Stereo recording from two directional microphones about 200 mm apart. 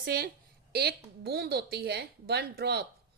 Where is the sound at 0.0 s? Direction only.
50° right (ahead or behind).